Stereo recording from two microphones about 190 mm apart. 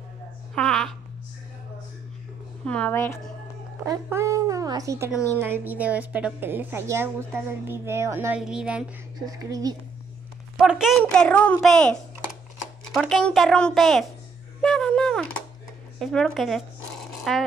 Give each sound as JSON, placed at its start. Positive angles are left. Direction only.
{"t": 0.6, "sound": "babbling", "side_deg": 5}
{"t": 2.6, "sound": "a woman's voice", "side_deg": 5}
{"t": 3.8, "sound": "a woman's voice", "side_deg": -15}
{"t": 8.4, "sound": "speech", "side_deg": -5}
{"t": 9.2, "sound": "speech", "side_deg": -20}
{"t": 10.6, "sound": "a woman's voice", "side_deg": -5}
{"t": 14.6, "sound": "a sound", "side_deg": 5}
{"t": 16.0, "sound": "speech", "side_deg": 5}